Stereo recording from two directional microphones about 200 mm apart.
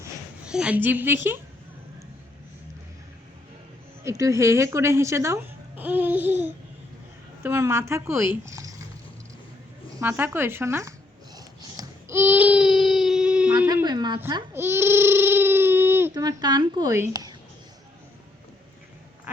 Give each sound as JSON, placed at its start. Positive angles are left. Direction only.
{"t": 0.4, "sound": "speech", "side_deg": -5}
{"t": 4.0, "sound": "speech", "side_deg": -15}
{"t": 10.0, "sound": "speech", "side_deg": -10}
{"t": 11.3, "sound": "a sound", "side_deg": -15}
{"t": 13.8, "sound": "a child's voice", "side_deg": -20}